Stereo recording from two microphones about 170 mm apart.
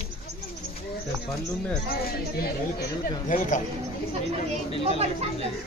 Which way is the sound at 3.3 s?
45° left (ahead or behind).